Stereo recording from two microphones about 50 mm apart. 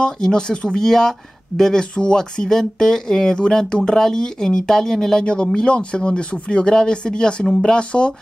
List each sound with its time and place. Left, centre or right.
0.0 s speech: centre